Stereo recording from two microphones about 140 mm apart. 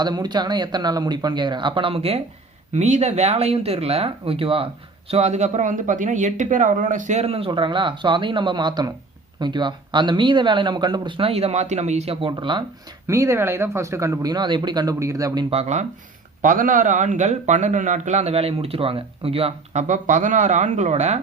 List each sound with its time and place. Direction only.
0.0 s speech: 30° right (ahead or behind)
13.1 s speech: 20° right (ahead or behind)
15.4 s speech: 50° right (ahead or behind)
16.4 s a man's voice: 70° right (ahead or behind); by 19.8 s 45° right (ahead or behind)
19.9 s a man's voice: 60° right (ahead or behind)